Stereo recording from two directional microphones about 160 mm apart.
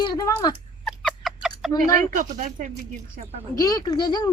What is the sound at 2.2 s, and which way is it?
Speech, 50° right (ahead or behind).